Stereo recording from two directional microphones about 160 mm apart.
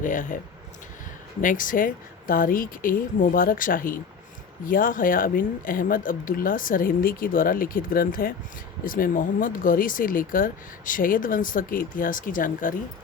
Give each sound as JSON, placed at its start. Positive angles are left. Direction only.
{"t": 0.0, "sound": "speech", "side_deg": 55}
{"t": 1.4, "sound": "speech", "side_deg": 55}